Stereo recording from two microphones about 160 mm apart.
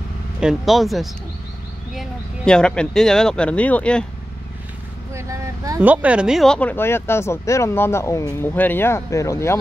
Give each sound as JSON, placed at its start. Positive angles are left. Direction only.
{"t": 0.4, "sound": "speech", "side_deg": 0}
{"t": 5.1, "sound": "vehicle", "side_deg": -20}
{"t": 5.8, "sound": "speech", "side_deg": -10}